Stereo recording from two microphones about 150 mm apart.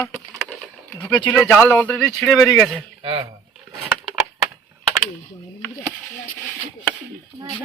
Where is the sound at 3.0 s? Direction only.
35° right (ahead or behind).